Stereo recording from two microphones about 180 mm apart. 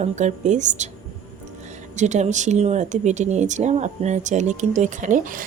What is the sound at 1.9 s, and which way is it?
Speech, 40° right (ahead or behind).